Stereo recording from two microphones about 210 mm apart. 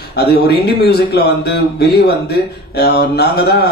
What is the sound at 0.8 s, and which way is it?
Speech, 50° left (ahead or behind).